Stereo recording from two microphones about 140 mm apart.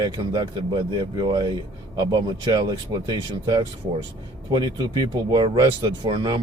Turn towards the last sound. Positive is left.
turn(degrees=-30)  # may be behind; listen again after turning